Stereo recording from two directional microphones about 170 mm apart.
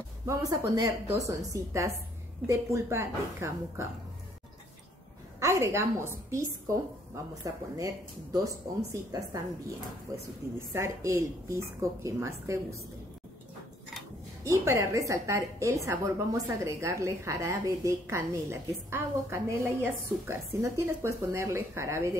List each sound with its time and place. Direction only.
0.3 s a woman's voice: 20° right (ahead or behind)
5.4 s a woman's voice: 15° right (ahead or behind)
10.1 s a woman's voice: 20° right (ahead or behind)
14.4 s a woman's voice: 15° right (ahead or behind)